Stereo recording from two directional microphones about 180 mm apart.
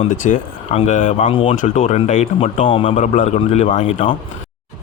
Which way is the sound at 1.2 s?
30° left (ahead or behind).